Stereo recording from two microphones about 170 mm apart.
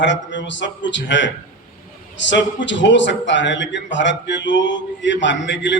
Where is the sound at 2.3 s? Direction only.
90° left.